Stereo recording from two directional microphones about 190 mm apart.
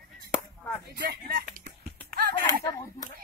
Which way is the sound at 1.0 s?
50° right (ahead or behind).